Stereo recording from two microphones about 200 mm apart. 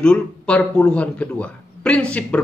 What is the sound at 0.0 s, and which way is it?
A man's voice, 5° left (ahead or behind).